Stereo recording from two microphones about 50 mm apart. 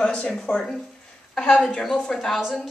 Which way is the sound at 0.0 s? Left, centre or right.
Centre.